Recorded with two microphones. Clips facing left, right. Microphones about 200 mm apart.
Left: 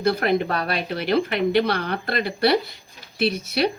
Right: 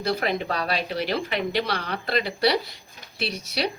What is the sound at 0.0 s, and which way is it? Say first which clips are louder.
A woman's voice: left 5 dB; 55° left (ahead or behind).